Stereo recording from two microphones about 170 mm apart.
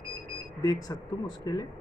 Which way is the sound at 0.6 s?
20° left (ahead or behind).